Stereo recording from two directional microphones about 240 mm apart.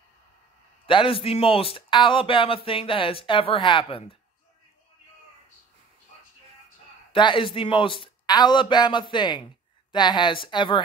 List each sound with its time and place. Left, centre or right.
0.8 s speech: left
7.1 s speech: left